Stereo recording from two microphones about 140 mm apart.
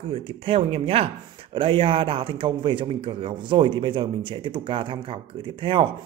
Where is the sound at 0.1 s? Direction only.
40° right (ahead or behind).